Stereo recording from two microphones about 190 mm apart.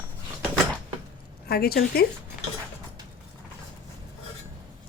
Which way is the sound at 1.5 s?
55° left (ahead or behind).